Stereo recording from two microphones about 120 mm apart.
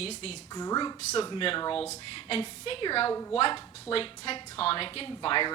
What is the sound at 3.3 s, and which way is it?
A woman's voice, 50° left (ahead or behind).